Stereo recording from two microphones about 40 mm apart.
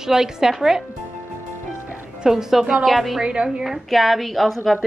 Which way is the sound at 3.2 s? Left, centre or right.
Right.